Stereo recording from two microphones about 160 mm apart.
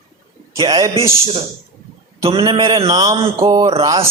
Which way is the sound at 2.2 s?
35° right (ahead or behind).